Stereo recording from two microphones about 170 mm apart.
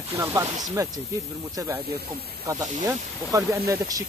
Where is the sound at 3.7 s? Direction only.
20° right (ahead or behind).